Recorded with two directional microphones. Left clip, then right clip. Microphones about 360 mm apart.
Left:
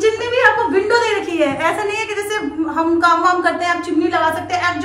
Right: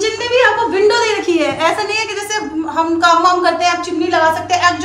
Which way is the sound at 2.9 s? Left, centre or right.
Centre.